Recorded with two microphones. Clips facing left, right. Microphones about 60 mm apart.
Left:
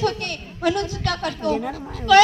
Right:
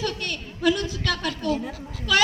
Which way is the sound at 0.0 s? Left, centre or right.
Left.